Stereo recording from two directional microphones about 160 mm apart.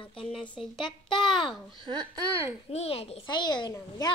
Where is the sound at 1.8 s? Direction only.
25° right (ahead or behind).